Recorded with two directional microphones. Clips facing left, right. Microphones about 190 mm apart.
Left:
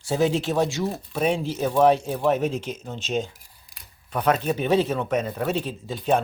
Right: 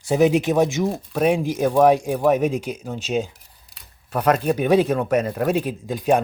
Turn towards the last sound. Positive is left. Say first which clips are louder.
# right 4 dB
turn(degrees=-10)  # may be behind; listen again after turning